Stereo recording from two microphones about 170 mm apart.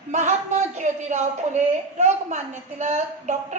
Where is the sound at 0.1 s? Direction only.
45° right (ahead or behind).